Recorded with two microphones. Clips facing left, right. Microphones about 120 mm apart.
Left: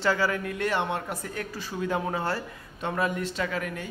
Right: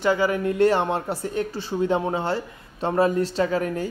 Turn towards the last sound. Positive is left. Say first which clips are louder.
# right 8 dB
turn(degrees=-35)  # may be behind; listen again after turning